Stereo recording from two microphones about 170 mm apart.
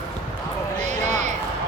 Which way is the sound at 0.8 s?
45° right (ahead or behind).